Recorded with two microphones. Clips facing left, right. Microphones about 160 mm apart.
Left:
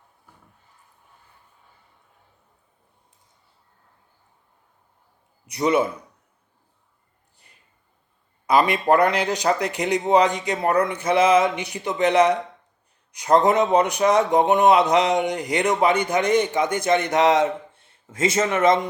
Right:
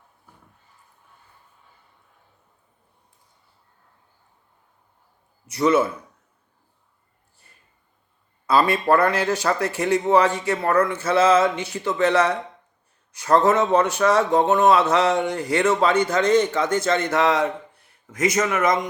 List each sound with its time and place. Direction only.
5.5 s a man's voice: 15° left (ahead or behind)
8.4 s a man's voice: 15° left (ahead or behind)